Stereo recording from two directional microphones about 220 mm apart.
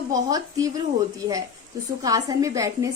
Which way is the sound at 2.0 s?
15° right (ahead or behind).